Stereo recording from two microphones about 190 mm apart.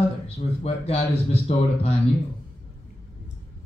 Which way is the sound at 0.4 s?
35° left (ahead or behind).